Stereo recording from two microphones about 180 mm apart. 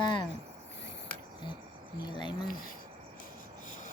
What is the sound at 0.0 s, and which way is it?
Cricket, 25° left (ahead or behind).